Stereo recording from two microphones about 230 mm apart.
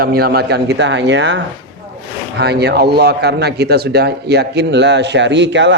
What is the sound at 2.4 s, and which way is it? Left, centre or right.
Speech, right.